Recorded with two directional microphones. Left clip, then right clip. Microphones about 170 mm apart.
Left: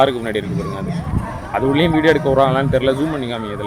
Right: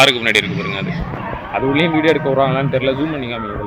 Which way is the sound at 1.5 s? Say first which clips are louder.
Even; 30° left (ahead or behind).